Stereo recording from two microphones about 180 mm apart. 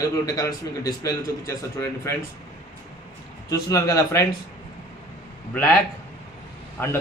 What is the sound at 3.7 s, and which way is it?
Speech, 20° left (ahead or behind).